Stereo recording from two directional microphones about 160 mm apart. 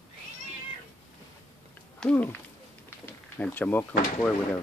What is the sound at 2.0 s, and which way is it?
Speech, 10° left (ahead or behind).